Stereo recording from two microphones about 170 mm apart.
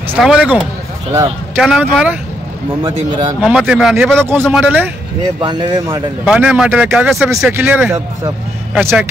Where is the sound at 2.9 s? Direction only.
40° right (ahead or behind).